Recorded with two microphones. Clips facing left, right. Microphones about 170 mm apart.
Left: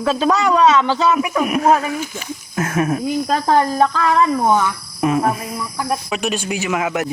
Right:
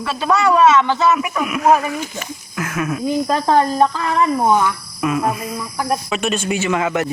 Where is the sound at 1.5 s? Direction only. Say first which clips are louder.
Right 2 dB; 40° left (ahead or behind).